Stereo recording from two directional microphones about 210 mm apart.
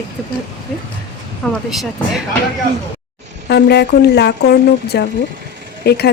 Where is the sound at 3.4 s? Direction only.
50° left (ahead or behind).